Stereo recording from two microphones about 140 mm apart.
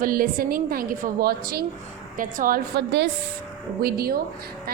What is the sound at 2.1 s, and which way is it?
Speech, 80° right.